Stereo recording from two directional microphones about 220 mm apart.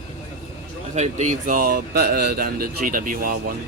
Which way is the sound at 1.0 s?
35° right (ahead or behind).